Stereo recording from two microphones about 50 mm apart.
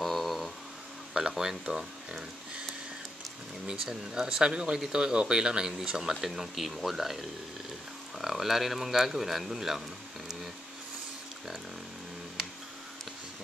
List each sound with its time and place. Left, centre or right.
0.0 s a sound: centre
1.1 s speech: centre
3.6 s speech: centre